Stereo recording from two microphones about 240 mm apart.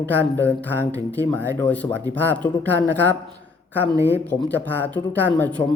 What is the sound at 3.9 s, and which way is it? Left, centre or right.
Speech, centre.